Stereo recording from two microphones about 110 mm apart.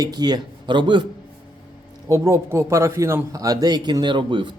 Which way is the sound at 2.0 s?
25° right (ahead or behind).